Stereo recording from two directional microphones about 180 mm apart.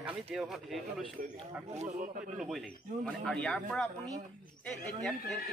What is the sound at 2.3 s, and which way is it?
Speech, centre (ahead or behind).